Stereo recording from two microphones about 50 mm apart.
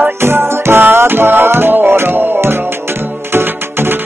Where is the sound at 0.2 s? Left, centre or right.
Right.